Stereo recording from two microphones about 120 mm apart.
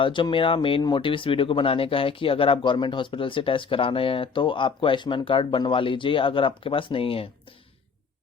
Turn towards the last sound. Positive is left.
turn(degrees=50)  # may be behind; listen again after turning